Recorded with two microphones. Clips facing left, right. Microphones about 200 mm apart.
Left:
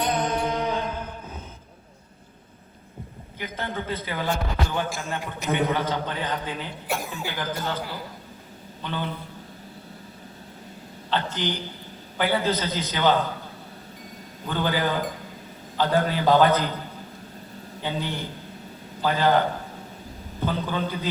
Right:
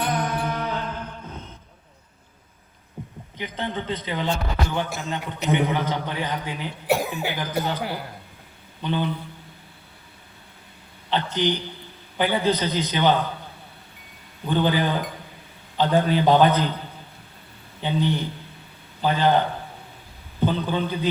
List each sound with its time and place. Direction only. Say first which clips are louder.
0.0 s music: left 1 dB; 20° left (ahead or behind)
3.3 s a man's voice: right 2 dB; 20° right (ahead or behind)
6.8 s cough: right 8 dB; 65° right (ahead or behind)
7.8 s a man's voice: right 4 dB; 65° right (ahead or behind)
8.8 s a man's voice: right 6 dB; 15° right (ahead or behind)
11.1 s a man's voice: right 4 dB; 15° right (ahead or behind)
14.4 s a man's voice: right 3 dB; 20° right (ahead or behind)
17.8 s a man's voice: right 6 dB; 20° right (ahead or behind)